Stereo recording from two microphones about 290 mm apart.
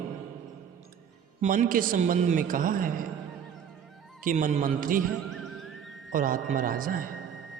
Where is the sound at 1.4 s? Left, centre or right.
Right.